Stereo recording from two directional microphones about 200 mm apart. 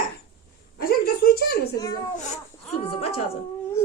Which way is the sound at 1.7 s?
20° left (ahead or behind).